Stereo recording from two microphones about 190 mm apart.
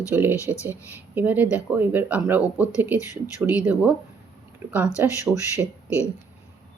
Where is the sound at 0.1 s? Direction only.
10° right (ahead or behind).